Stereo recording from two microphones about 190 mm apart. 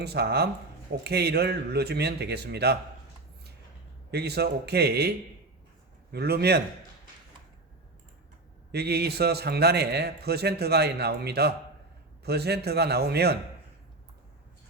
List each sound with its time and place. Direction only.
0.0 s a man's voice: 60° right (ahead or behind)
4.1 s a man's voice: 60° right (ahead or behind)
8.7 s a man's voice: 60° right (ahead or behind)